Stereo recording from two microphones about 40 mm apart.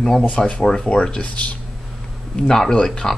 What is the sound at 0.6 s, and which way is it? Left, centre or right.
Speech, centre.